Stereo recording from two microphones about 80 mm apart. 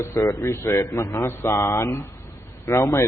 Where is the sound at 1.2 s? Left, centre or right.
Left.